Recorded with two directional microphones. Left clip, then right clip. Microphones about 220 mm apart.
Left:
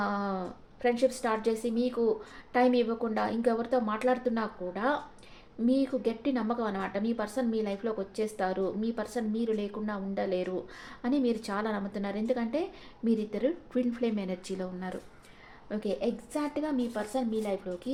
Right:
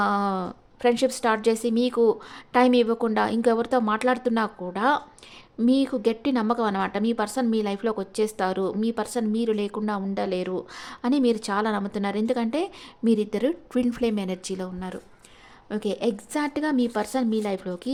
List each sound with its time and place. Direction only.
0.0 s a woman's voice: 35° right (ahead or behind)